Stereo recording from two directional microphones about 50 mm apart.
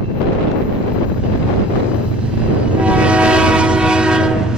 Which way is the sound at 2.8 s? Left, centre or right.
Right.